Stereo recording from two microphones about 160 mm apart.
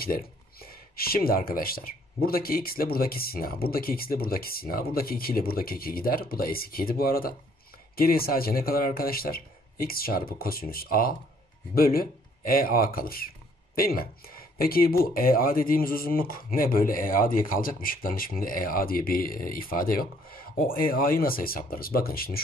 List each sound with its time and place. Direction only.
0.0 s speech: 70° left (ahead or behind)